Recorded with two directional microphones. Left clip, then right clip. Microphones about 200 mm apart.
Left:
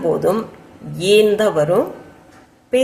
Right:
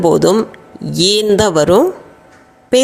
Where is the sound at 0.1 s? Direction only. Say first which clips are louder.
Right 6 dB; 40° right (ahead or behind).